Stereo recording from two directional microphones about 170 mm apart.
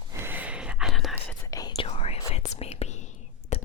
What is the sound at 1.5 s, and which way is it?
Whispering, 20° left (ahead or behind).